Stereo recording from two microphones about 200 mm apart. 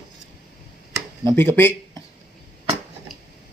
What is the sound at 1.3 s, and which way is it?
Speech, 10° left (ahead or behind).